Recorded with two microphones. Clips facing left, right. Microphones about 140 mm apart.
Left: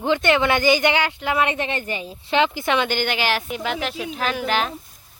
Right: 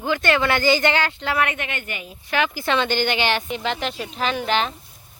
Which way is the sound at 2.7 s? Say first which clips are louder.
Right 3 dB; 5° left (ahead or behind).